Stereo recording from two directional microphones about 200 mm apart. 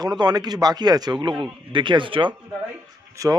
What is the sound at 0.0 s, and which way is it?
A man's voice, 20° right (ahead or behind).